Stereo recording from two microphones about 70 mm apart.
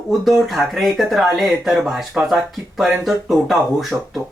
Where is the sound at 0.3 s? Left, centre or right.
Centre.